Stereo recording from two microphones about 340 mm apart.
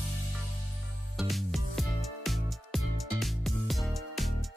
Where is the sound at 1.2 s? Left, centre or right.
Centre.